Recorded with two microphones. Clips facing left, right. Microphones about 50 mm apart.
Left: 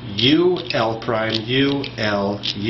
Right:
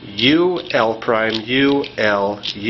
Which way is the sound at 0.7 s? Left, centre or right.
Right.